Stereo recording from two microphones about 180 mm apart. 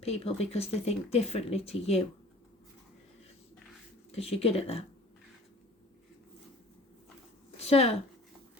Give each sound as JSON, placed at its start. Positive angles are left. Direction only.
{"t": 0.0, "sound": "speech", "side_deg": 35}
{"t": 4.1, "sound": "speech", "side_deg": 35}
{"t": 7.5, "sound": "a sound", "side_deg": 35}